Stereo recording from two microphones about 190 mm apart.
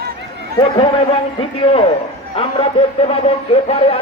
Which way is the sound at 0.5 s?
25° left (ahead or behind).